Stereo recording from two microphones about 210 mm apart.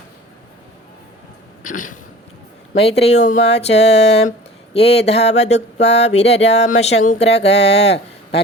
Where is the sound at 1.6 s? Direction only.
40° left (ahead or behind).